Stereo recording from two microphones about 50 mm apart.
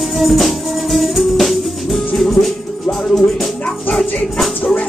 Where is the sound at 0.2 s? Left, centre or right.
Centre.